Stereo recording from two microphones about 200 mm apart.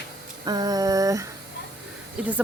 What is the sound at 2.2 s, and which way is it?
Speech, 5° right (ahead or behind).